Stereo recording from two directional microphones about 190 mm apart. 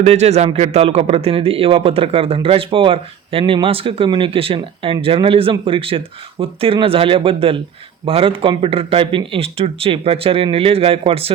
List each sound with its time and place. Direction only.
0.0 s a man's voice: 35° right (ahead or behind)